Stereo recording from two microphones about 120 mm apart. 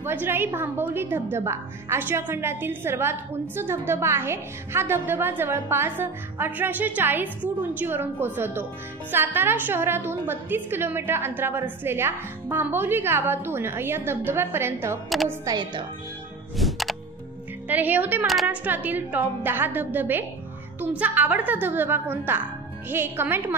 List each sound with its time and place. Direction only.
0.0 s a woman's voice: 15° right (ahead or behind)
16.5 s music: centre (ahead or behind)
17.6 s speech: 15° right (ahead or behind)
18.2 s a woman's voice: centre (ahead or behind)
18.5 s a woman's voice: 15° right (ahead or behind)